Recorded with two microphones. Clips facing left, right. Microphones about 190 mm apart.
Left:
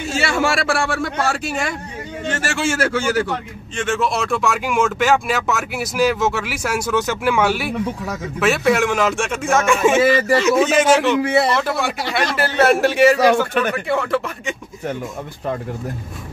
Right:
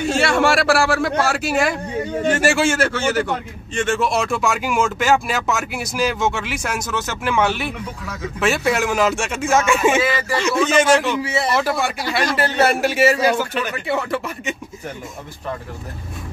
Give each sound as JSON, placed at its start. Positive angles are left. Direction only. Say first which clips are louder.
{"t": 0.0, "sound": "a man's voice", "louder": "right 3 dB", "side_deg": 0}
{"t": 2.6, "sound": "speech", "louder": "right 1 dB", "side_deg": 5}
{"t": 13.2, "sound": "speech", "louder": "left 4 dB", "side_deg": 55}
{"t": 13.8, "sound": "speech", "louder": "left 2 dB", "side_deg": -5}